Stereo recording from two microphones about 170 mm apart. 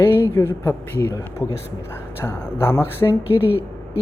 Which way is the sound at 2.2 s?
15° left (ahead or behind).